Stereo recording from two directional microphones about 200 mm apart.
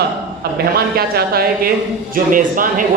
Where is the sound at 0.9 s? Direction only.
50° right (ahead or behind).